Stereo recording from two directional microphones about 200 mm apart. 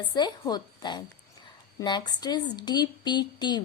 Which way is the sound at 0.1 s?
20° left (ahead or behind).